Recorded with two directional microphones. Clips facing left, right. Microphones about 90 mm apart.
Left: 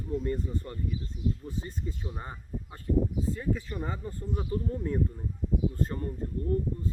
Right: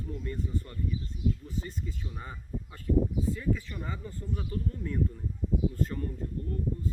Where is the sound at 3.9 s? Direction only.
40° left (ahead or behind).